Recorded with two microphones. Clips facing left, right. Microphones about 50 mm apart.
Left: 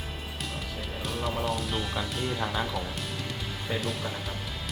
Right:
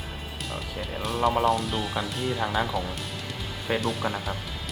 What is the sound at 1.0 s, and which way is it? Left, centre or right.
Music, centre.